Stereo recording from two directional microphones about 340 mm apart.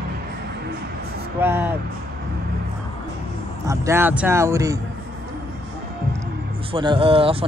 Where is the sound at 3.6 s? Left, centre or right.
Centre.